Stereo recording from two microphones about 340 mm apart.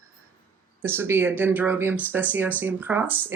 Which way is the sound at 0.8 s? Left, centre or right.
Centre.